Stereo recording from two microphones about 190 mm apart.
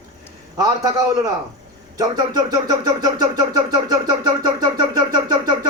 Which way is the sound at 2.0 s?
20° right (ahead or behind).